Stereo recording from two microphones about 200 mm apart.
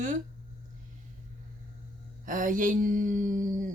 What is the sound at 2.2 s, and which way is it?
Speech, 40° right (ahead or behind).